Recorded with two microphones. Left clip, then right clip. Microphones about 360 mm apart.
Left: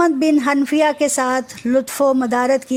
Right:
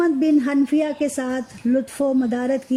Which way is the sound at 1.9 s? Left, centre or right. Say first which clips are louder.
Left 5 dB; left.